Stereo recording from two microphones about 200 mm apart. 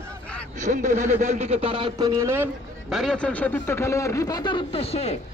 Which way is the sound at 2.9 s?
Centre (ahead or behind).